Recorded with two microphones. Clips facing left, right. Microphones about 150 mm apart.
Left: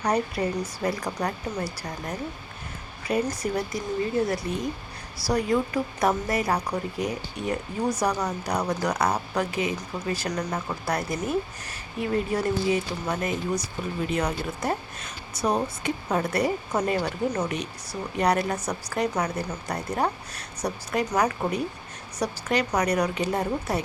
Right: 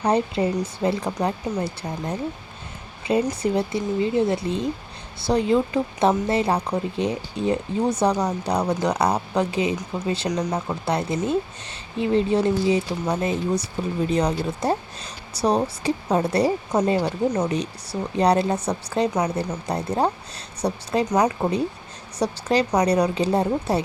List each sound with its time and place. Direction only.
0.0 s speech: 25° right (ahead or behind)